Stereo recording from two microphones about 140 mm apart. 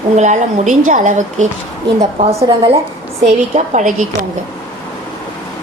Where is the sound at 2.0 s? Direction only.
50° right (ahead or behind).